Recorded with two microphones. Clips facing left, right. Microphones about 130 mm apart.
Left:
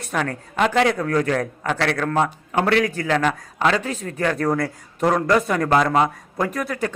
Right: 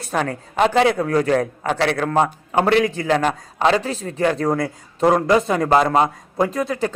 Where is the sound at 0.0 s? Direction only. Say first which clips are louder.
Right 2 dB; 30° right (ahead or behind).